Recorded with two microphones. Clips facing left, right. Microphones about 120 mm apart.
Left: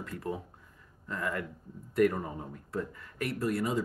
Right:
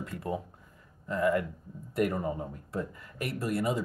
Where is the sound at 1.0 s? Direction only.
15° right (ahead or behind).